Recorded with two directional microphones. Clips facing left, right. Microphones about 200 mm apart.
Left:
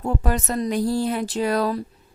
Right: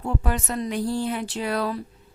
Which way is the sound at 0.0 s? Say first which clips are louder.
Left 3 dB; 40° left (ahead or behind).